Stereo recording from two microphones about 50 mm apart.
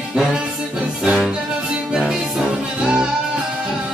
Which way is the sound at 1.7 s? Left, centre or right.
Centre.